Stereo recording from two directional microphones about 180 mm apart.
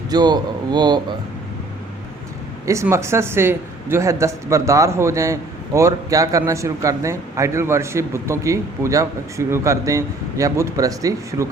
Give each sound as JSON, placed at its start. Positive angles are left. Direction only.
{"t": 0.1, "sound": "speech", "side_deg": -25}
{"t": 2.6, "sound": "speech", "side_deg": -15}